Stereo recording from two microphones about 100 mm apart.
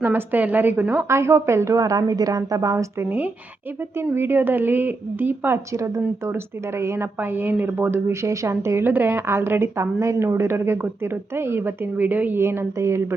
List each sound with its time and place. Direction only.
0.0 s speech: 20° right (ahead or behind)
4.1 s speech: 20° right (ahead or behind)
5.7 s speech: 30° right (ahead or behind)